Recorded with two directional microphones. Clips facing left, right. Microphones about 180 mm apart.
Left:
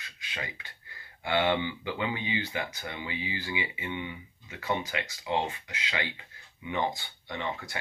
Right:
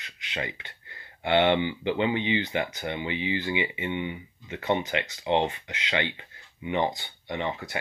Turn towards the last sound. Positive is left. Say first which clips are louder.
# right 4 dB
turn(degrees=-20)  # may be behind; listen again after turning